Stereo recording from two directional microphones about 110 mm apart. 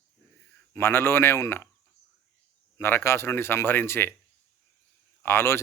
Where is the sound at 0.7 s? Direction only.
20° left (ahead or behind).